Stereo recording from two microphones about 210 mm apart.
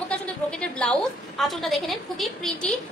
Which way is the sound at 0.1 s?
5° left (ahead or behind).